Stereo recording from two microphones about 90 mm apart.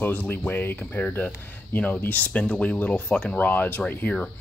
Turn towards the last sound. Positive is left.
turn(degrees=15)  # may be behind; listen again after turning